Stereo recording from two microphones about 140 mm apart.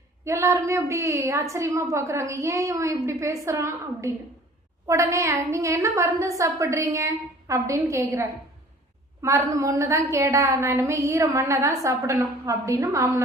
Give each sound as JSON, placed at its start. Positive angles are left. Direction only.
{"t": 0.3, "sound": "a woman's voice", "side_deg": -20}